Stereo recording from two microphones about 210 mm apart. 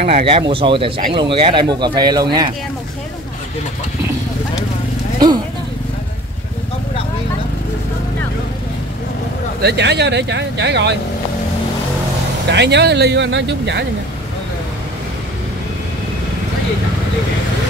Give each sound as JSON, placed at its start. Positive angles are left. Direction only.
{"t": 0.0, "sound": "speech", "side_deg": -25}
{"t": 9.6, "sound": "speech", "side_deg": -50}
{"t": 12.4, "sound": "speech", "side_deg": -55}